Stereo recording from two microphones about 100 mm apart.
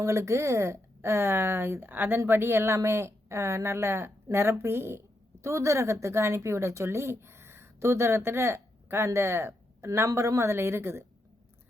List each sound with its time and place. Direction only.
0.0 s speech: 30° right (ahead or behind)